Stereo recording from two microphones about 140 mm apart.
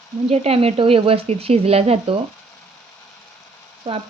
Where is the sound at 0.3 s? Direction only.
45° right (ahead or behind).